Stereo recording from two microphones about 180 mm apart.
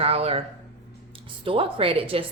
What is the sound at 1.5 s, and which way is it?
Speech, 30° right (ahead or behind).